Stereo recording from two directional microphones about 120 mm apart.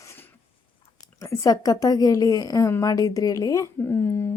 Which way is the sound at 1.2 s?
30° left (ahead or behind).